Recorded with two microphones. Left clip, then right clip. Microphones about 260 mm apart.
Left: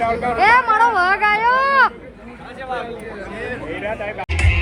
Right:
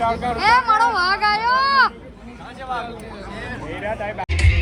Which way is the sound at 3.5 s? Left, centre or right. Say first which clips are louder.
Left 1 dB; right.